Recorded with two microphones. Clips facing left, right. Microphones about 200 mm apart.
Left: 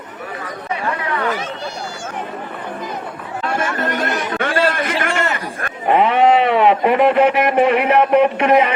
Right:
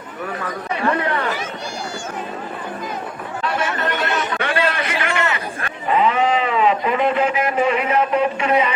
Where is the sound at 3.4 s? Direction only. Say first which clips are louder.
Left 2 dB; 50° left (ahead or behind).